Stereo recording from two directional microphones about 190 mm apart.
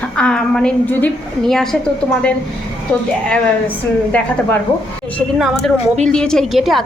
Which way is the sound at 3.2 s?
5° left (ahead or behind).